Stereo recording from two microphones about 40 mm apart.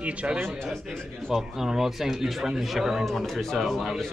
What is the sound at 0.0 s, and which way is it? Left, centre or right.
Speech, right.